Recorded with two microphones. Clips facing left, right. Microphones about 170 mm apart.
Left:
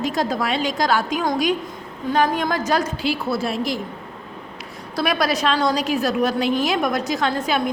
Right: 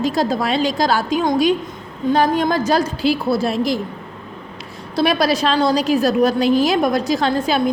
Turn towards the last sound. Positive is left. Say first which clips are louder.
# right 4 dB
turn(degrees=-35)  # may be behind; listen again after turning